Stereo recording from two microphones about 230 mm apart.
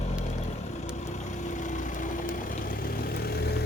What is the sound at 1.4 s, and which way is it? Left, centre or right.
Vehicle, left.